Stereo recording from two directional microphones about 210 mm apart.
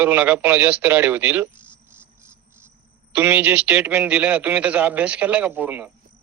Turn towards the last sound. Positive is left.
turn(degrees=-10)  # may be behind; listen again after turning